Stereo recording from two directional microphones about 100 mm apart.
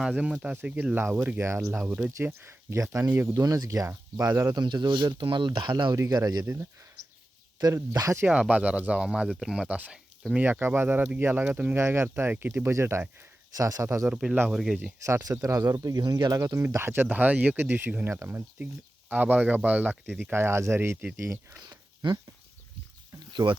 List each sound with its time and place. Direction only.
0.0 s speech: 10° right (ahead or behind)
1.4 s speech: 30° right (ahead or behind)
3.4 s speech: 35° right (ahead or behind)
4.5 s speech: 45° right (ahead or behind)
6.4 s speech: 25° right (ahead or behind)
8.3 s speech: 10° right (ahead or behind); by 14.0 s 35° right (ahead or behind)
14.0 s speech: 5° right (ahead or behind)
15.0 s speech: 35° right (ahead or behind)
21.6 s a sound: 45° right (ahead or behind)
23.3 s speech: 55° right (ahead or behind)